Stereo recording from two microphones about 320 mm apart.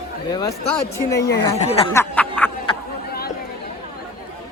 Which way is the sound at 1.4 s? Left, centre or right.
Centre.